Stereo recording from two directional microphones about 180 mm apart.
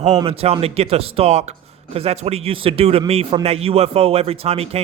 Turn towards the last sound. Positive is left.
turn(degrees=-35)  # may be behind; listen again after turning